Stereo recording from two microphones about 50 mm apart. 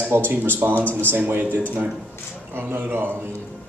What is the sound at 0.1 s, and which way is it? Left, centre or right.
Speech, right.